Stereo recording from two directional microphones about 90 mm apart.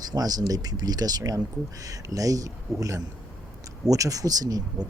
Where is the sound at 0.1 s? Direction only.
45° right (ahead or behind).